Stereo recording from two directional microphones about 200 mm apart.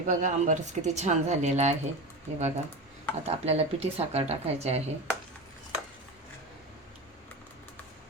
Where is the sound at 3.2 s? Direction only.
30° right (ahead or behind).